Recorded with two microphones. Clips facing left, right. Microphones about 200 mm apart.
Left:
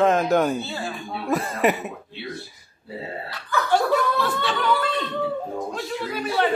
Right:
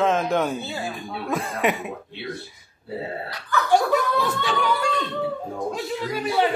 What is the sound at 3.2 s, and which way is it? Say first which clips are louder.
Speech: right 1 dB; 15° right (ahead or behind).